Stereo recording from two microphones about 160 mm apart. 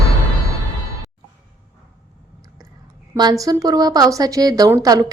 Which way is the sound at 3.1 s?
25° right (ahead or behind).